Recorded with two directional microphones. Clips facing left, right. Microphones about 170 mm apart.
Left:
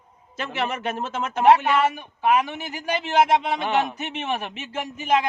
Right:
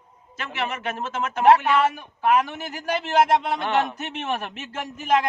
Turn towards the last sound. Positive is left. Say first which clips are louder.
# even
turn(degrees=0)  # may be behind; listen again after turning